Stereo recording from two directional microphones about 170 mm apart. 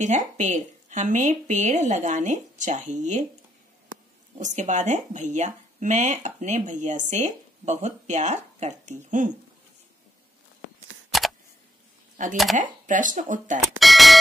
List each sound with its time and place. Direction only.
0.0 s speech: 45° right (ahead or behind)
4.4 s speech: 45° right (ahead or behind)
11.1 s camera: centre (ahead or behind)
12.8 s speech: 50° right (ahead or behind)
13.7 s doorbell: centre (ahead or behind)